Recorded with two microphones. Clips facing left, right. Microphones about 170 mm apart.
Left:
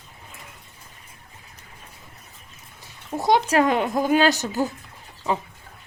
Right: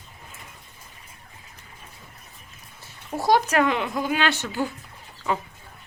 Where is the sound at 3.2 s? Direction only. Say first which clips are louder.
Left 1 dB; 25° left (ahead or behind).